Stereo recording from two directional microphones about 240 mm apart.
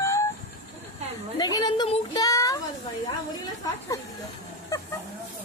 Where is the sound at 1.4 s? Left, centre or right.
Centre.